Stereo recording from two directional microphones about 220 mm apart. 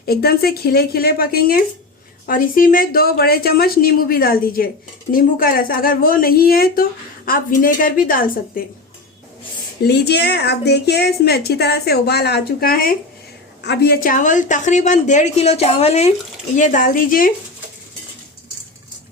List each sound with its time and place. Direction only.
0.0 s a woman's voice: 45° left (ahead or behind)
9.8 s a woman's voice: 50° left (ahead or behind)